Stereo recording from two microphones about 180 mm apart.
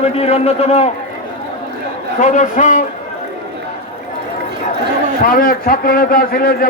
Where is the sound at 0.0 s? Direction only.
35° left (ahead or behind).